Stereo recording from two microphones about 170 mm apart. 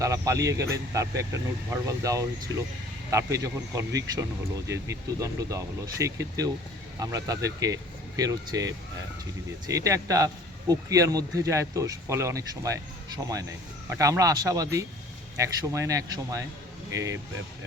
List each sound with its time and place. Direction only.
0.0 s speech: 20° right (ahead or behind)